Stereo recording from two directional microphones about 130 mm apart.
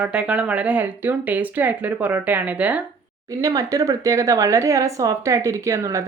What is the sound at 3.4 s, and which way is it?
Speech, 25° right (ahead or behind).